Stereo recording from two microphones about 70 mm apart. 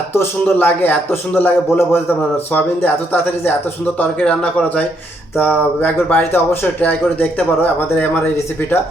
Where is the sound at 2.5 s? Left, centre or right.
Left.